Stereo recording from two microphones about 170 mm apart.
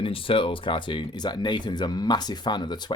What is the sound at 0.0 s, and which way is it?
Speech, 30° left (ahead or behind).